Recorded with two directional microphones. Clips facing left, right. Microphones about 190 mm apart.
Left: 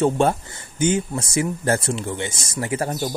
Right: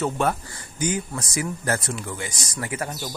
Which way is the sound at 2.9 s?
50° left (ahead or behind).